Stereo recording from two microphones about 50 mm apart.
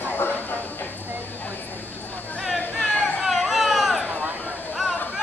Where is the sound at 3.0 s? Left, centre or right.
Centre.